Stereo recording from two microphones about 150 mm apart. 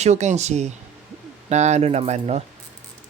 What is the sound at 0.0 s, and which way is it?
Speech, 50° right (ahead or behind).